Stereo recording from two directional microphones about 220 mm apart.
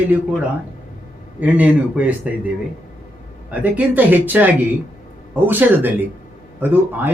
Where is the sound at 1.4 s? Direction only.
5° right (ahead or behind).